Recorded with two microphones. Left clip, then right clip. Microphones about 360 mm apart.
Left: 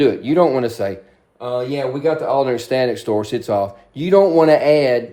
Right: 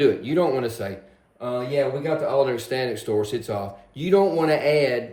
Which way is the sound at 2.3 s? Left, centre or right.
Centre.